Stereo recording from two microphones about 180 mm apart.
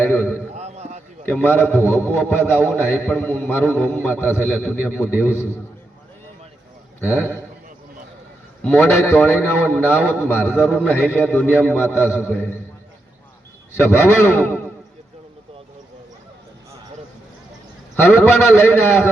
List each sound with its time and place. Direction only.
0.0 s a sound: 10° left (ahead or behind)
0.5 s a sound: 35° right (ahead or behind)
1.2 s a man's voice: 10° left (ahead or behind)
8.6 s a man's voice: 10° left (ahead or behind)
13.7 s a man's voice: 15° left (ahead or behind)
17.9 s a man's voice: 10° left (ahead or behind)